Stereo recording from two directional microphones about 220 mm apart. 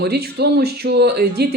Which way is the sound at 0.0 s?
45° right (ahead or behind).